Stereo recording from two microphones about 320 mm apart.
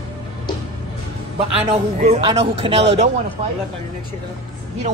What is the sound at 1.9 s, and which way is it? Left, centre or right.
A woman's voice, right.